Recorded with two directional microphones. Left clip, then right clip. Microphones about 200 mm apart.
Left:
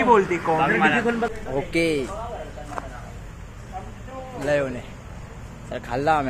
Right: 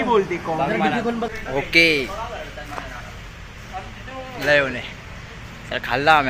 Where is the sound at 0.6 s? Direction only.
55° right (ahead or behind).